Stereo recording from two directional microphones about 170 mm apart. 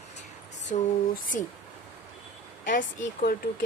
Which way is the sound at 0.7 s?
45° left (ahead or behind).